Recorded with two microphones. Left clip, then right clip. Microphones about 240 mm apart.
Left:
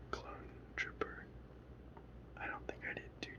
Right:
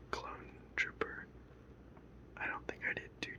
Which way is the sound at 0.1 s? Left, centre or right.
Right.